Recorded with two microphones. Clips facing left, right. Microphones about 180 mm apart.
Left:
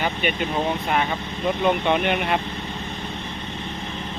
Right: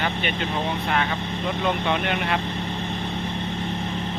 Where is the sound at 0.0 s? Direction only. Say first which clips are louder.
Left 2 dB; 15° left (ahead or behind).